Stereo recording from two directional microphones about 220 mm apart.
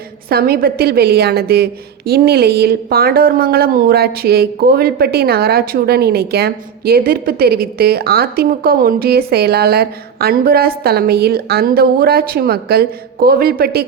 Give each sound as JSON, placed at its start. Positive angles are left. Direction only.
{"t": 0.3, "sound": "a woman's voice", "side_deg": -45}